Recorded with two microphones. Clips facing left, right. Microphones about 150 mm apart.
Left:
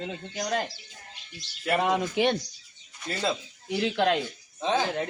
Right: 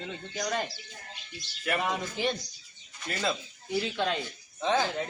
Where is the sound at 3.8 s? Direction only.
70° left (ahead or behind).